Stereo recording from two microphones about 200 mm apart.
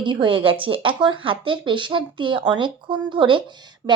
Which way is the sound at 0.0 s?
25° right (ahead or behind).